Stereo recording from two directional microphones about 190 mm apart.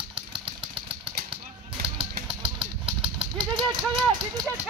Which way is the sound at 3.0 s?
5° right (ahead or behind).